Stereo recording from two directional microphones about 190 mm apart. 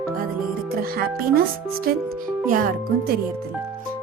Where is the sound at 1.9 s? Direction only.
50° right (ahead or behind).